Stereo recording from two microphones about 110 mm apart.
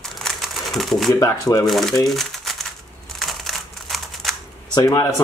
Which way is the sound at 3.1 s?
Centre (ahead or behind).